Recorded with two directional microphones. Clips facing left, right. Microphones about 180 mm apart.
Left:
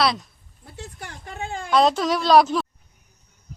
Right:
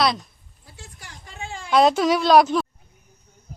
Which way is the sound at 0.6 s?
55° left (ahead or behind).